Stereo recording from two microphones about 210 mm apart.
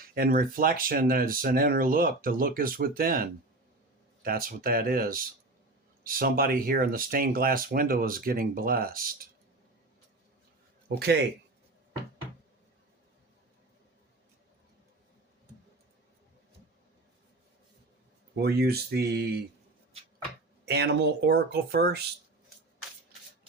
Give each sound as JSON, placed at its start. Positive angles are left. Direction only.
{"t": 0.0, "sound": "speech", "side_deg": -45}
{"t": 10.8, "sound": "a man's voice", "side_deg": -50}
{"t": 18.3, "sound": "speech", "side_deg": -50}
{"t": 20.7, "sound": "speech", "side_deg": -50}